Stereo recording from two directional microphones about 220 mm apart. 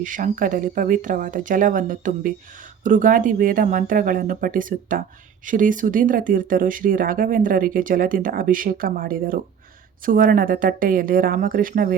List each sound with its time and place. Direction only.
0.0 s speech: 35° right (ahead or behind)